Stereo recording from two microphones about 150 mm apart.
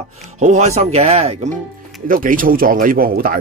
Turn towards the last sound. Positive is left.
turn(degrees=-75)  # may be behind; listen again after turning